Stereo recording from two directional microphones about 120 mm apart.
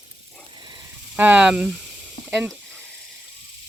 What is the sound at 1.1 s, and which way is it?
Speech, 15° right (ahead or behind).